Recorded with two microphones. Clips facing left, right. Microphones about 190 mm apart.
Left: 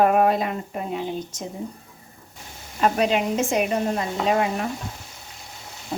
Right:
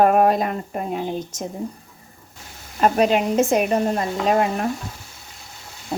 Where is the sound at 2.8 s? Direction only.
45° right (ahead or behind).